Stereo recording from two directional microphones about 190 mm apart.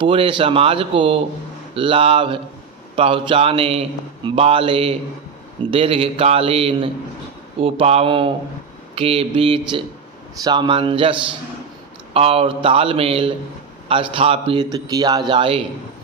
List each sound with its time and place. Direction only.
0.0 s a man's voice: 25° right (ahead or behind)